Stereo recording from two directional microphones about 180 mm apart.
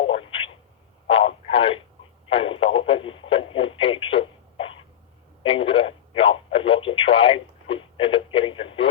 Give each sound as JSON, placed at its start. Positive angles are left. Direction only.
{"t": 0.0, "sound": "telephone", "side_deg": 30}
{"t": 1.0, "sound": "radio", "side_deg": 30}